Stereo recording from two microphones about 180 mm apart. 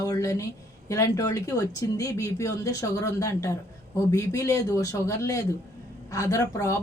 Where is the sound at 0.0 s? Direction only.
20° left (ahead or behind).